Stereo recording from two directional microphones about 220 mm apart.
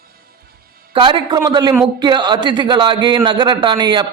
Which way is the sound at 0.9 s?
20° right (ahead or behind).